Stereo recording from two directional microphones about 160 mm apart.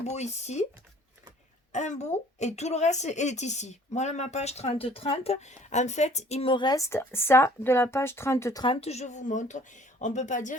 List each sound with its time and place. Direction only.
0.0 s speech: 45° left (ahead or behind)
1.7 s speech: 50° left (ahead or behind); by 8.6 s 15° left (ahead or behind)
8.6 s speech: 35° left (ahead or behind)